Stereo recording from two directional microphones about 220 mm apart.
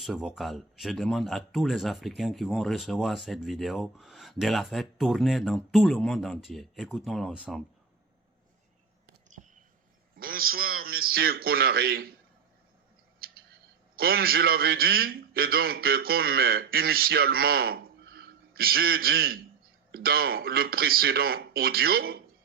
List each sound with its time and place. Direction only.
0.0 s speech: centre (ahead or behind)
10.2 s a man's voice: 40° right (ahead or behind)
13.2 s a sound: 45° right (ahead or behind)
13.9 s a man's voice: 45° right (ahead or behind)